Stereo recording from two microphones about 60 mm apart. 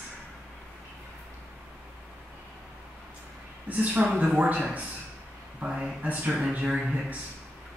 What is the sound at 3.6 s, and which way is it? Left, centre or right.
Speech, right.